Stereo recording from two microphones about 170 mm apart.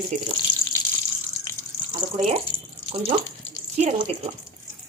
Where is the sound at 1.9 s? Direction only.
40° right (ahead or behind).